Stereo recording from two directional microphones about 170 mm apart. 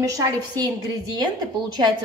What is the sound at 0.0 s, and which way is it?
Speech, 20° right (ahead or behind).